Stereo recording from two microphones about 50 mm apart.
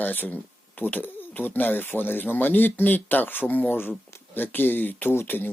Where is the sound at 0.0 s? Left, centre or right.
Left.